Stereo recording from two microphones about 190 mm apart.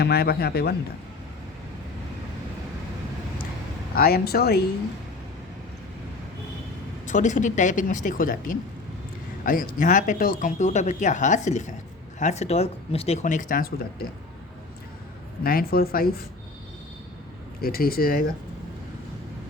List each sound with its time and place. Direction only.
0.0 s a man's voice: 55° left (ahead or behind)
3.9 s a man's voice: 55° left (ahead or behind)
7.0 s speech: 40° left (ahead or behind)
15.4 s speech: 50° left (ahead or behind)
17.6 s speech: 50° left (ahead or behind)